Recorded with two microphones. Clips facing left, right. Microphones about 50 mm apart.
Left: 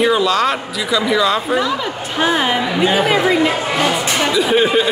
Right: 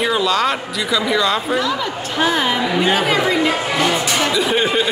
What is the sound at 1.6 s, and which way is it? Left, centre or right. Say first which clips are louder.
Speech: left 1 dB; centre.